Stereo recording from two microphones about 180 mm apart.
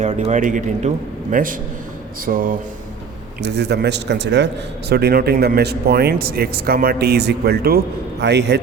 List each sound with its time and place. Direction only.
0.0 s speech: 40° right (ahead or behind)
3.4 s speech: 70° right (ahead or behind)
8.2 s speech: 70° right (ahead or behind)